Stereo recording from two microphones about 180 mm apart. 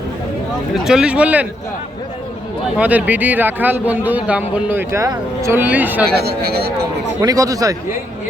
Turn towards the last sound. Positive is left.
turn(degrees=-20)  # may be behind; listen again after turning